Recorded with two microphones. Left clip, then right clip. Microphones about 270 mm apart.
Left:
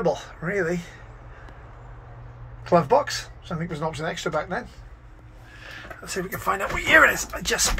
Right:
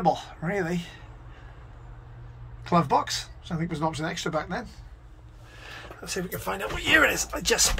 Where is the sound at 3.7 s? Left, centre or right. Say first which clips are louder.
Left 1 dB; centre.